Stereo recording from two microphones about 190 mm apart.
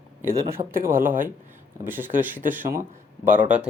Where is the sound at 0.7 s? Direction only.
45° right (ahead or behind).